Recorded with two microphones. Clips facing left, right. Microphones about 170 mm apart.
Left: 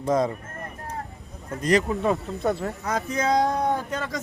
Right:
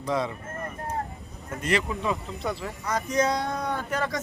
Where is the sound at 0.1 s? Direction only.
45° left (ahead or behind).